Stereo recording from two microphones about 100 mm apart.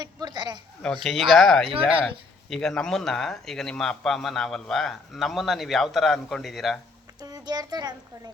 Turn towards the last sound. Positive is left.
turn(degrees=-40)  # may be behind; listen again after turning